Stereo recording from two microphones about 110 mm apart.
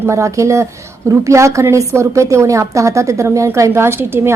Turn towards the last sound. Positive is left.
turn(degrees=-25)  # may be behind; listen again after turning